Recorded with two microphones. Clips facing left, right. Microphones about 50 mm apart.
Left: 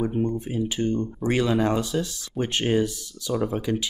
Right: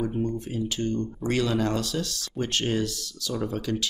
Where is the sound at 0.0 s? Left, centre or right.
Left.